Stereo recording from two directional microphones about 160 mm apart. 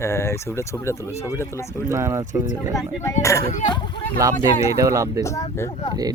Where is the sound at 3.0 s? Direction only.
20° left (ahead or behind).